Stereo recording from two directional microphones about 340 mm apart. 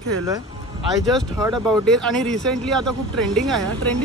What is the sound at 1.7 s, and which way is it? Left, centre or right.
Speech, centre.